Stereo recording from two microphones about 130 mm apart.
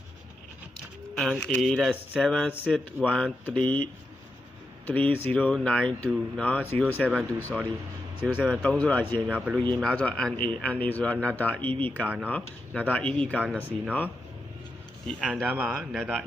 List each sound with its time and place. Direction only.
1.1 s speech: centre (ahead or behind)
4.9 s speech: 15° left (ahead or behind)
8.2 s speech: 5° right (ahead or behind)
8.6 s speech: 10° left (ahead or behind)
9.2 s speech: 10° right (ahead or behind)
9.8 s speech: 10° left (ahead or behind)
12.0 s speech: 10° right (ahead or behind)
12.3 s speech: 10° left (ahead or behind)
15.2 s speech: 5° right (ahead or behind)